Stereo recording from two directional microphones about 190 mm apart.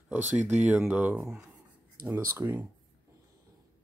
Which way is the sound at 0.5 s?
5° right (ahead or behind).